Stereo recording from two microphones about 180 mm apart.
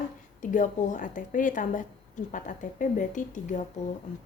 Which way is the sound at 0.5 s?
45° left (ahead or behind).